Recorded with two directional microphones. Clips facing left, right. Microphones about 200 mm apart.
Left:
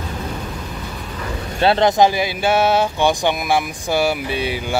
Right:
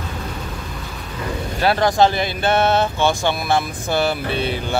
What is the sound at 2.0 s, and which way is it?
Speech, 10° left (ahead or behind).